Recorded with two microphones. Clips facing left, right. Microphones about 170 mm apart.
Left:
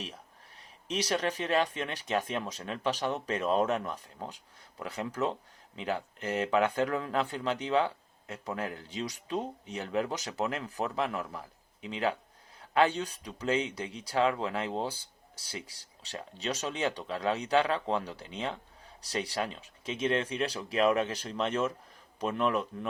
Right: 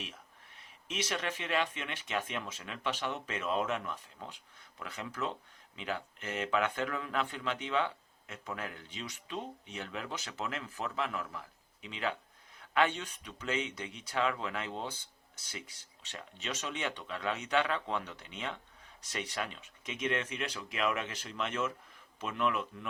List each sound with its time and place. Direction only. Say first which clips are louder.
0.9 s speech: left 6 dB; 35° left (ahead or behind)